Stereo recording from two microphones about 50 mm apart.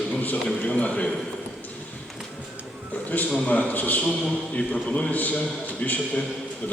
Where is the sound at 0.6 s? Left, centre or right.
Left.